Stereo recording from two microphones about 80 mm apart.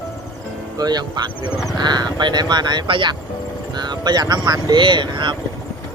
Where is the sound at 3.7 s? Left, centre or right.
Right.